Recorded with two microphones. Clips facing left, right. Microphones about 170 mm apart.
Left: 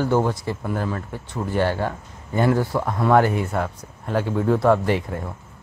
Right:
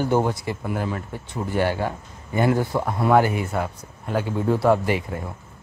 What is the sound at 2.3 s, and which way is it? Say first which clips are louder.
Speech: left 1 dB; 15° right (ahead or behind).